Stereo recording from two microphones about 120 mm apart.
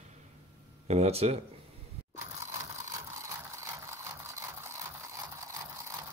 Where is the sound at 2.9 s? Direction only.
25° right (ahead or behind).